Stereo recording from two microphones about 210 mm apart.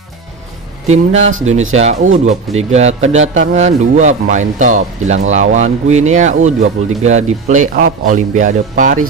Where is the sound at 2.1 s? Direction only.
30° right (ahead or behind).